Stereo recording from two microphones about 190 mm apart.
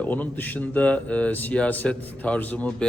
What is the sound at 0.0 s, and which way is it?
Speech, 10° left (ahead or behind).